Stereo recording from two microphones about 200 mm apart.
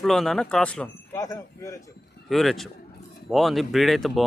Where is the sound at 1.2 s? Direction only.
15° left (ahead or behind).